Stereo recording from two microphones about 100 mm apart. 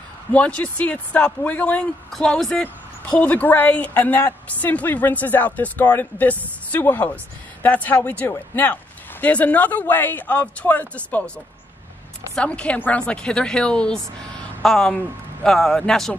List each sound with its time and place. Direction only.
0.3 s a woman's voice: 10° left (ahead or behind)
12.4 s a woman's voice: 10° left (ahead or behind)